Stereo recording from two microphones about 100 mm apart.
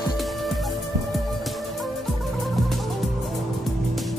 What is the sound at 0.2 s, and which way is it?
Music, centre (ahead or behind).